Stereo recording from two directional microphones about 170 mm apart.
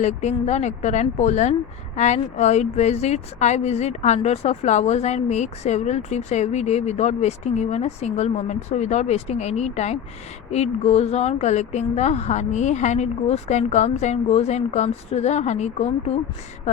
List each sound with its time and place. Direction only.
0.0 s speech: 40° left (ahead or behind)